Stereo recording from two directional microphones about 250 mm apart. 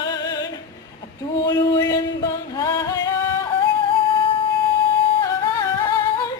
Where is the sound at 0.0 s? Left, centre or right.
Centre.